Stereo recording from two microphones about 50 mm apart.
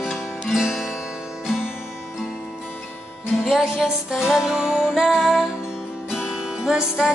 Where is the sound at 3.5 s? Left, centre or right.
Centre.